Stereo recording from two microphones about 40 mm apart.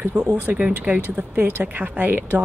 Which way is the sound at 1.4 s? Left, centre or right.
Right.